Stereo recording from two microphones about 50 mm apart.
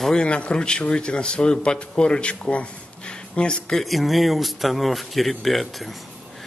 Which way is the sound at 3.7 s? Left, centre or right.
Centre.